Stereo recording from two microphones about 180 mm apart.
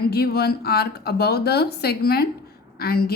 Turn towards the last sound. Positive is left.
turn(degrees=55)  # may be behind; listen again after turning